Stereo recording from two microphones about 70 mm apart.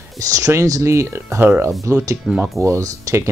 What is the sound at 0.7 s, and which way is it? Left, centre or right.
Speech, right.